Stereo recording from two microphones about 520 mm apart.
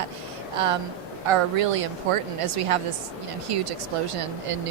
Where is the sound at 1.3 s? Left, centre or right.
Right.